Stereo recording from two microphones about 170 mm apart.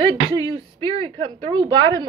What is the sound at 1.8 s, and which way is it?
Speech, 30° right (ahead or behind).